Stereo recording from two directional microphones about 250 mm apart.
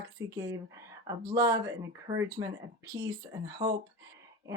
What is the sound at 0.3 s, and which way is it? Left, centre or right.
Speech, centre.